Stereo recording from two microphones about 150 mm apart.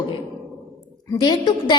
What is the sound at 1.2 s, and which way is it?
Speech, 30° left (ahead or behind).